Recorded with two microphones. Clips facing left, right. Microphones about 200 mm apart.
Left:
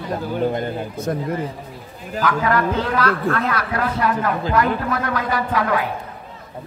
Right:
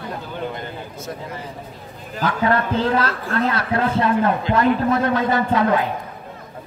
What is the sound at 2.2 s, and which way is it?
Speech, 30° right (ahead or behind).